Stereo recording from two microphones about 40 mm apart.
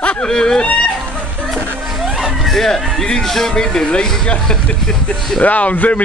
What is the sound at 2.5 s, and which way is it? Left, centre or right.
Speech, centre.